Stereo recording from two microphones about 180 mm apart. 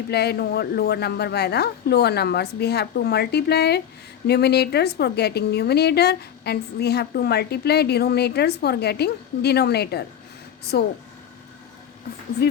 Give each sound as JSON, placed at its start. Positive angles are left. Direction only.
{"t": 0.1, "sound": "a woman's voice", "side_deg": 65}
{"t": 12.4, "sound": "speech", "side_deg": 60}